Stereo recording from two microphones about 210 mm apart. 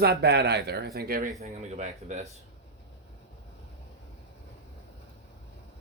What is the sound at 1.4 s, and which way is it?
Speech, 35° right (ahead or behind).